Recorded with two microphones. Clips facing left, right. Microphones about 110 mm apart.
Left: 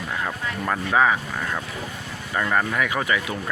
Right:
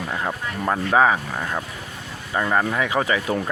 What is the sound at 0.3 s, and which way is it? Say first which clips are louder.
Speech: right 3 dB; 25° right (ahead or behind).